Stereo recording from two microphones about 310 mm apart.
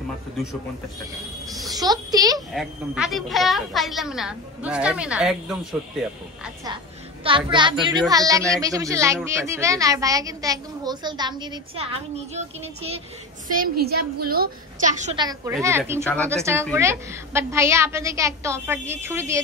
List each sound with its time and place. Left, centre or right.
1.7 s a child's voice: centre
2.3 s a child's voice: centre
6.4 s a child's voice: centre
16.0 s a child's voice: centre
16.7 s a child's voice: centre